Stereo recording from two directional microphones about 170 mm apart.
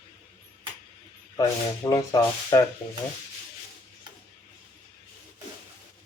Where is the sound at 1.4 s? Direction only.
20° left (ahead or behind).